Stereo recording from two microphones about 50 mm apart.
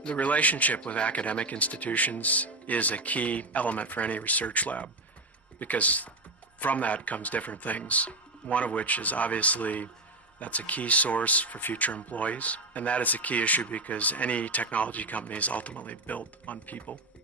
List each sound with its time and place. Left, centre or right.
0.2 s speech: left